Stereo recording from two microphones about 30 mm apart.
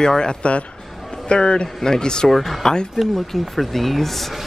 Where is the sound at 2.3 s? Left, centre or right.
Centre.